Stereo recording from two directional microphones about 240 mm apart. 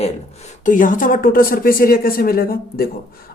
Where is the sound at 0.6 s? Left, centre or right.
Left.